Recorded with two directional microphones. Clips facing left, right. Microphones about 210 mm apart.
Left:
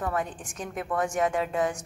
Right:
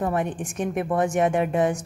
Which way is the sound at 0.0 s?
25° right (ahead or behind).